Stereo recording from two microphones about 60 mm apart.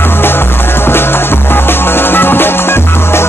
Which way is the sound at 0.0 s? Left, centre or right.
Left.